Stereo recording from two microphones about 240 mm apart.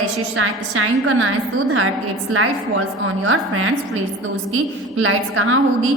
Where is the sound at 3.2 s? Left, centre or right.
Right.